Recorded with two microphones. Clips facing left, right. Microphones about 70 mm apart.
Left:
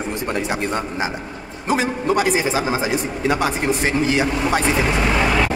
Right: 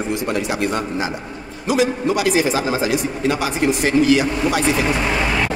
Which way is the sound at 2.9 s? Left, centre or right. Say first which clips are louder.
Even; left.